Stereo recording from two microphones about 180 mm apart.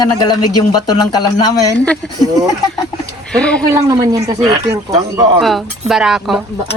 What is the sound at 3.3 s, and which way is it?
Speech, 5° left (ahead or behind).